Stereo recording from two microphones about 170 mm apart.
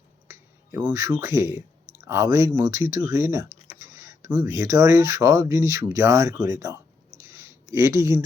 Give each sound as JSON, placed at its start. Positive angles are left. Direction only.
{"t": 0.3, "sound": "finger snapping", "side_deg": -15}
{"t": 1.0, "sound": "speech", "side_deg": -20}
{"t": 7.2, "sound": "a sound", "side_deg": -15}